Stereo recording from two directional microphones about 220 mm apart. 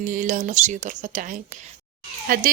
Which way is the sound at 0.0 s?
35° right (ahead or behind).